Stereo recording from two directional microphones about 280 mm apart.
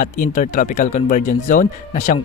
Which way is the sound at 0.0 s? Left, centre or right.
Left.